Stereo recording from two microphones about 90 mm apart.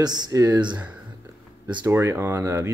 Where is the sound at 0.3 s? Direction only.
40° right (ahead or behind).